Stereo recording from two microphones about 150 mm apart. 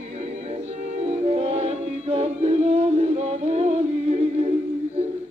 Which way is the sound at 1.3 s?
45° right (ahead or behind).